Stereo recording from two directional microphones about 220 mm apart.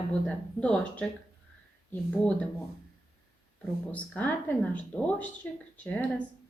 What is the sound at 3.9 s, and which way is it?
Speech, 5° left (ahead or behind).